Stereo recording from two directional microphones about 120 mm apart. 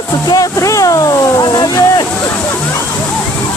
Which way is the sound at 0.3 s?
30° left (ahead or behind).